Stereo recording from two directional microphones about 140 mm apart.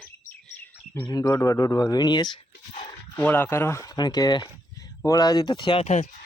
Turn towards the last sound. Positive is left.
turn(degrees=55)  # may be behind; listen again after turning